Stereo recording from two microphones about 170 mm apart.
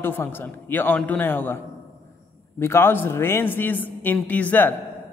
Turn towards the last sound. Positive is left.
turn(degrees=10)  # may be behind; listen again after turning